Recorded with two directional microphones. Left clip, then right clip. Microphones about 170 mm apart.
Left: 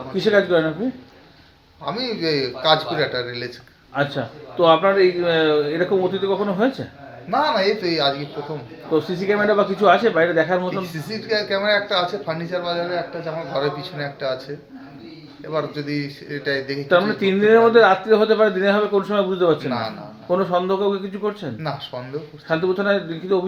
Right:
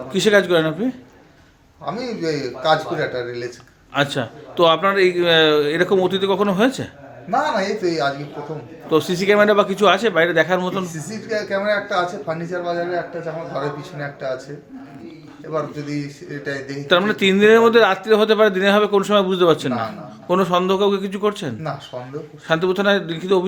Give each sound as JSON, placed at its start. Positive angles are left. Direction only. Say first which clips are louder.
{"t": 0.2, "sound": "a man's voice", "louder": "right 2 dB", "side_deg": -50}
{"t": 1.8, "sound": "a man's voice", "louder": "left 1 dB", "side_deg": -10}
{"t": 3.9, "sound": "speech", "louder": "right 2 dB", "side_deg": -55}
{"t": 7.3, "sound": "a man's voice", "louder": "left 1 dB", "side_deg": -15}
{"t": 9.0, "sound": "a man's voice", "louder": "right 5 dB", "side_deg": -55}
{"t": 11.1, "sound": "a man's voice", "louder": "left 1 dB", "side_deg": -10}
{"t": 15.5, "sound": "a man's voice", "louder": "even", "side_deg": -10}
{"t": 16.9, "sound": "a man's voice", "louder": "right 2 dB", "side_deg": -50}